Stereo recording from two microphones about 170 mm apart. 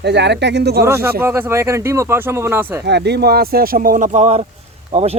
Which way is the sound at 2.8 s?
80° right.